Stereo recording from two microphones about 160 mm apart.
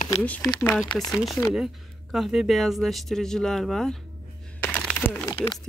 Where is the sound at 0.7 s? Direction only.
Centre (ahead or behind).